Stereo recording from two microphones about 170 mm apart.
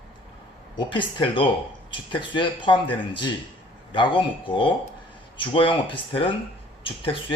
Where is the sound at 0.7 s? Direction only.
30° left (ahead or behind).